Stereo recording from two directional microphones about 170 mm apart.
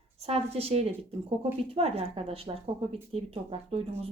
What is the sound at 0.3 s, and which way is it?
Speech, 35° right (ahead or behind).